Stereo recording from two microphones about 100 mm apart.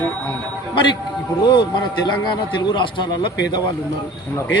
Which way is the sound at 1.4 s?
50° left (ahead or behind).